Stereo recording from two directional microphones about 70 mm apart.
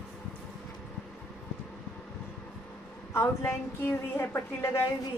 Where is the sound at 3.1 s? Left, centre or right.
Left.